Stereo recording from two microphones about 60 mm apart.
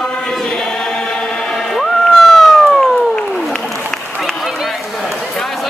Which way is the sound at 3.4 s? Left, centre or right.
Centre.